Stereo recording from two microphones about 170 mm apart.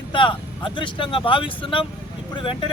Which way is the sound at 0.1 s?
30° left (ahead or behind).